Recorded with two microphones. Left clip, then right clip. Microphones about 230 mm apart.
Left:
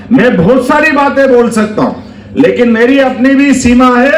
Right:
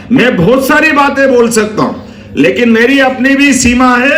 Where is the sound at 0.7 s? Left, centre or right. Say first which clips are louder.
Even; right.